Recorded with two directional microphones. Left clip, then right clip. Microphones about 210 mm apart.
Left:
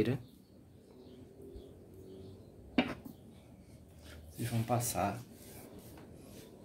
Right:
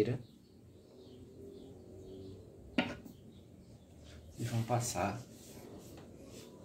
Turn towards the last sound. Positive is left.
turn(degrees=40)  # may be behind; listen again after turning